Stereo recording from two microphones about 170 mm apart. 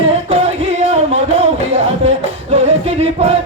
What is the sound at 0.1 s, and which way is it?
Music, 35° right (ahead or behind).